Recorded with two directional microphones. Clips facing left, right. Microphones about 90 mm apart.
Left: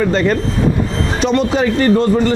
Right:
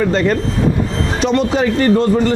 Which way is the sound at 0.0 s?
20° left (ahead or behind).